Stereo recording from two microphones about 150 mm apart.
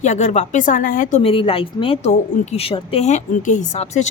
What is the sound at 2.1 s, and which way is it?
A woman's voice, 50° left (ahead or behind).